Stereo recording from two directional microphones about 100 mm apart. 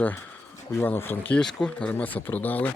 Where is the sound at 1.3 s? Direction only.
10° left (ahead or behind).